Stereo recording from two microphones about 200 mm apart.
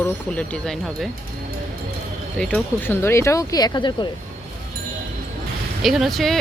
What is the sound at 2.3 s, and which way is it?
Speech, 5° left (ahead or behind).